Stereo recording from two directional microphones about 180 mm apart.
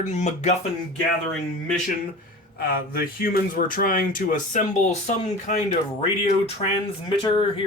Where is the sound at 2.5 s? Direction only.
55° left (ahead or behind); by 6.0 s 40° left (ahead or behind).